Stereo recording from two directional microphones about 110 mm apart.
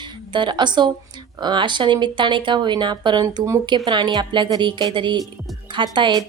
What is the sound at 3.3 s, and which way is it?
Speech, 30° right (ahead or behind).